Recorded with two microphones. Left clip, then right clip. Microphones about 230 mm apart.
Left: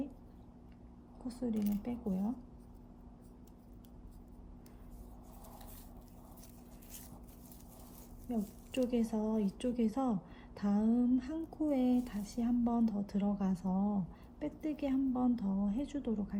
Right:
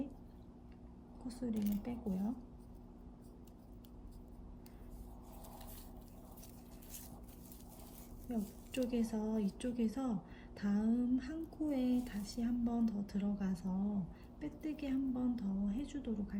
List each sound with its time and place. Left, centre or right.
1.3 s speech: centre
8.3 s speech: centre